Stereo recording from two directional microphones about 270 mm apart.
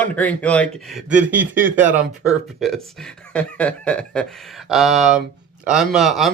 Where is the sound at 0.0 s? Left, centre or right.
Centre.